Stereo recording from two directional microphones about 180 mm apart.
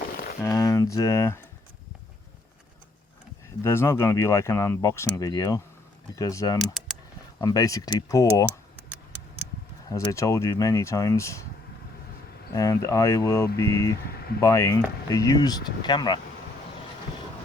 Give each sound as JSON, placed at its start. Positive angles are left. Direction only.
{"t": 0.5, "sound": "speech", "side_deg": 15}
{"t": 3.6, "sound": "speech", "side_deg": 15}
{"t": 6.6, "sound": "typing", "side_deg": 0}
{"t": 7.4, "sound": "speech", "side_deg": 20}
{"t": 9.9, "sound": "speech", "side_deg": 15}
{"t": 12.5, "sound": "speech", "side_deg": 20}